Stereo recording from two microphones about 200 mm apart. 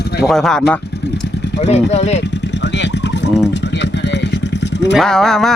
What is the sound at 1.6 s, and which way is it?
Speech, 35° left (ahead or behind).